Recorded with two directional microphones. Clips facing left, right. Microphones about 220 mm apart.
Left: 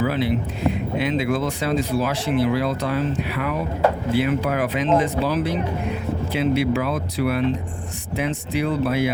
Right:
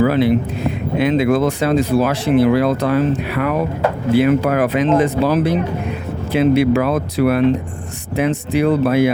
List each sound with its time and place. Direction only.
0.0 s speech: 50° right (ahead or behind)